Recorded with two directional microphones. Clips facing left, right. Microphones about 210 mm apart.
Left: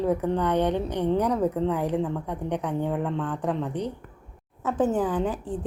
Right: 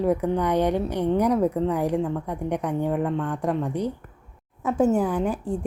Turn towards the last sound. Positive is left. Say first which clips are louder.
# right 2 dB
turn(degrees=-10)  # may be behind; listen again after turning